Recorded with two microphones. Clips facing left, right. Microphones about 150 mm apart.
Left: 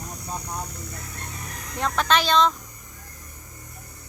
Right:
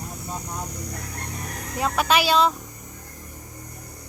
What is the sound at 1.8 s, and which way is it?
Speech, 10° right (ahead or behind).